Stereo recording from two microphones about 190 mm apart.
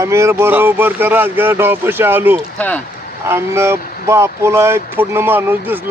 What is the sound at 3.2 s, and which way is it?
Speech, 15° right (ahead or behind).